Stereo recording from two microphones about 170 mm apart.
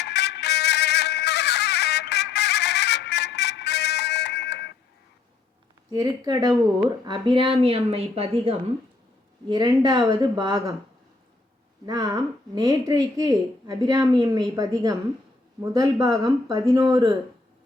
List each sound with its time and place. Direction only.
0.0 s music: 80° left
5.9 s a woman's voice: 20° right (ahead or behind)
11.9 s a woman's voice: 25° right (ahead or behind)